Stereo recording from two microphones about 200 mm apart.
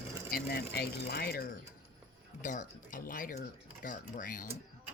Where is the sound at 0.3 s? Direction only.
50° left (ahead or behind).